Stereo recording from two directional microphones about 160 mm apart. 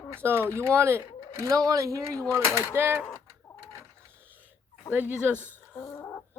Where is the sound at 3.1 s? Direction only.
15° left (ahead or behind).